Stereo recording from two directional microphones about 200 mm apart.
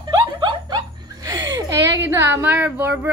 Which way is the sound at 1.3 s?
15° right (ahead or behind).